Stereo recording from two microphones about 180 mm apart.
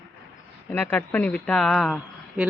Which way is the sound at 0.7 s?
10° left (ahead or behind).